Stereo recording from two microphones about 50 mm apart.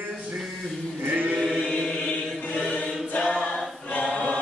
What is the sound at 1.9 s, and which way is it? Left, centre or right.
Choir, left.